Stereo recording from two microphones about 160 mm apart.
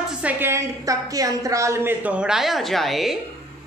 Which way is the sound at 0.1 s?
10° right (ahead or behind).